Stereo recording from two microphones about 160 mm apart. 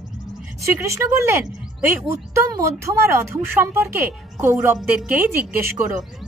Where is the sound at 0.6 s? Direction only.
20° right (ahead or behind).